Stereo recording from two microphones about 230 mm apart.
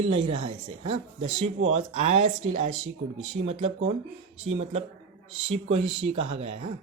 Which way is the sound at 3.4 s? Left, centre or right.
Right.